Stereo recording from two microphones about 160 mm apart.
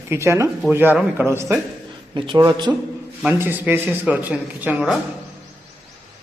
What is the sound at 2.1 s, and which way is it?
Speech, 30° right (ahead or behind).